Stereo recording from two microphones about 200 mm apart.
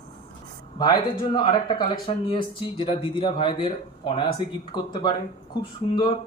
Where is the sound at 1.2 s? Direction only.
25° left (ahead or behind).